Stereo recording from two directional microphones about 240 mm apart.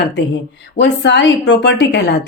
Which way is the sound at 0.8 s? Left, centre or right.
Left.